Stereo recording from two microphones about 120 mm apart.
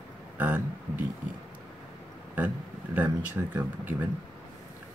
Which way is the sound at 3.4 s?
15° right (ahead or behind).